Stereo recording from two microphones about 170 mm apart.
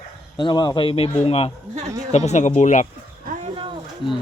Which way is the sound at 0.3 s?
25° left (ahead or behind).